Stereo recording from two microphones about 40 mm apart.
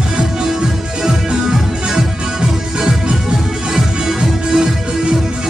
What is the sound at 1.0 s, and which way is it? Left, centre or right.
Music, centre.